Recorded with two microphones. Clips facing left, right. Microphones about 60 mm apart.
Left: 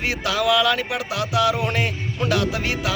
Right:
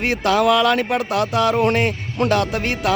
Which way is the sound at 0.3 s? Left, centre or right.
Right.